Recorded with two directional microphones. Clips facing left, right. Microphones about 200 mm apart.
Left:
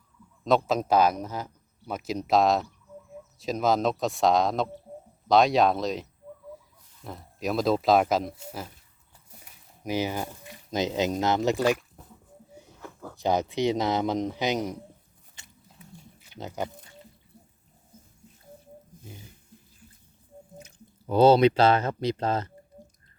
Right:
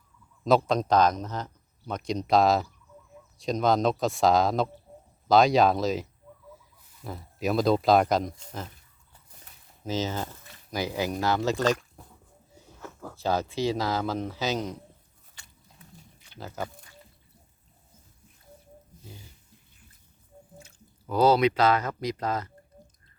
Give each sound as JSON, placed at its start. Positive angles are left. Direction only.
{"t": 0.4, "sound": "speech", "side_deg": 0}
{"t": 13.1, "sound": "speech", "side_deg": 15}
{"t": 15.4, "sound": "biting", "side_deg": 20}
{"t": 16.4, "sound": "speech", "side_deg": 20}
{"t": 20.6, "sound": "speech", "side_deg": 20}